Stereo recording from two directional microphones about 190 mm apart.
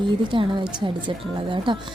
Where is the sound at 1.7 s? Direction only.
25° right (ahead or behind).